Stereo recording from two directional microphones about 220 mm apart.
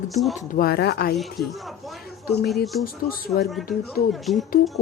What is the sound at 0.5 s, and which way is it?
Speech, 45° left (ahead or behind).